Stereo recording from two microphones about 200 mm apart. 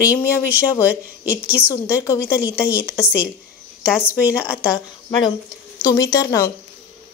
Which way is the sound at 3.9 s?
10° left (ahead or behind).